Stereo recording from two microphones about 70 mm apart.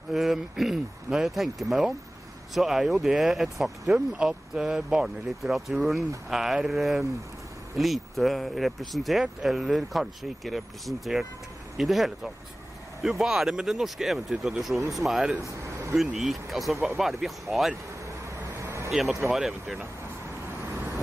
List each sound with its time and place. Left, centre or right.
0.1 s speech: centre
4.1 s speech: centre
13.2 s speech: centre
18.6 s a sound: right
18.9 s speech: centre